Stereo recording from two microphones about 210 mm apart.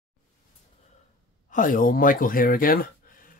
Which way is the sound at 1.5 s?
40° left (ahead or behind).